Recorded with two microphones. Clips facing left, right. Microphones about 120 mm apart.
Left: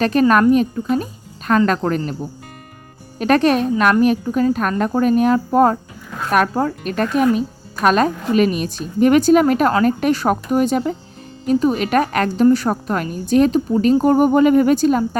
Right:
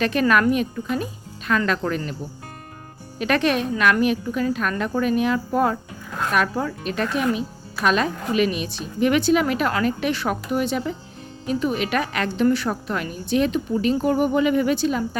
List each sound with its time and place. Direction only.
0.0 s a woman's voice: 40° left (ahead or behind)
3.2 s a woman's voice: 40° left (ahead or behind)